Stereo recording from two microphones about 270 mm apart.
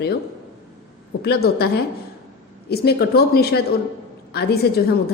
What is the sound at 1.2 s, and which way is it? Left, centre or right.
Speech, left.